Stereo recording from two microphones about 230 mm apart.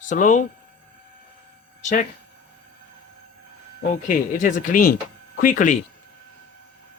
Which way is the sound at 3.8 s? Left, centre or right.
Left.